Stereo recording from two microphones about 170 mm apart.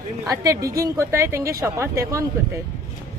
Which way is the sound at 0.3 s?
20° right (ahead or behind).